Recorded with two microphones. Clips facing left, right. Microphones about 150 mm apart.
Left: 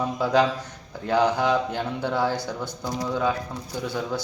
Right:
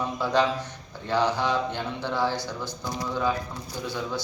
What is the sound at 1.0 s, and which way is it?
Speech, 50° left (ahead or behind).